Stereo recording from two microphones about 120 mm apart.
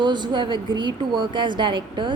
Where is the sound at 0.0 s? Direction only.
40° right (ahead or behind).